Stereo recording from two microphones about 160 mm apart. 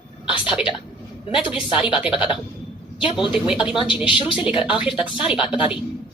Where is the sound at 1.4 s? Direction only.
30° left (ahead or behind).